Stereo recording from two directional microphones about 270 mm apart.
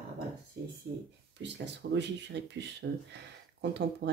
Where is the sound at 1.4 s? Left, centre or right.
Right.